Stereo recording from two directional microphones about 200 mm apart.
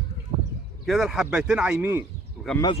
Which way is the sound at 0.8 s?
Centre (ahead or behind).